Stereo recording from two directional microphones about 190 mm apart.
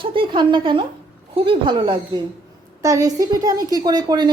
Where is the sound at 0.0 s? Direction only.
25° right (ahead or behind).